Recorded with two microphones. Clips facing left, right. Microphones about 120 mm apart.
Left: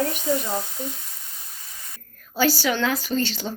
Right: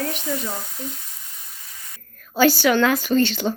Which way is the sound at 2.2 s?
60° right (ahead or behind).